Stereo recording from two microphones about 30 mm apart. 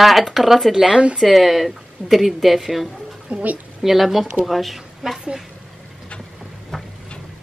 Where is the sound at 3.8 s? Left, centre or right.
Centre.